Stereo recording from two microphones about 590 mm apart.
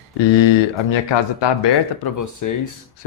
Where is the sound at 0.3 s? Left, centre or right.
Left.